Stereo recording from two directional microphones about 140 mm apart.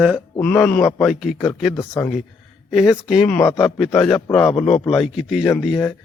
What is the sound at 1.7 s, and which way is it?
Speech, 20° left (ahead or behind).